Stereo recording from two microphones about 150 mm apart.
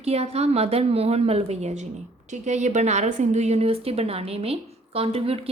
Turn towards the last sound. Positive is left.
turn(degrees=-40)  # may be behind; listen again after turning